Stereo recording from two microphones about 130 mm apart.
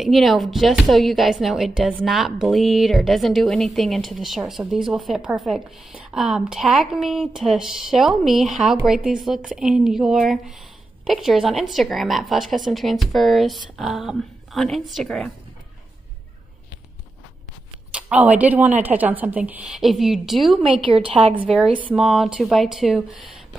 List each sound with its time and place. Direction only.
0.0 s a woman's voice: centre (ahead or behind)
17.9 s a woman's voice: 10° right (ahead or behind)
21.1 s speech: 45° right (ahead or behind)
21.9 s a woman's voice: centre (ahead or behind)